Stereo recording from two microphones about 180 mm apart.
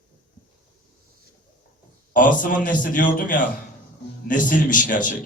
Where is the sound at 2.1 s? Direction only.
45° left (ahead or behind).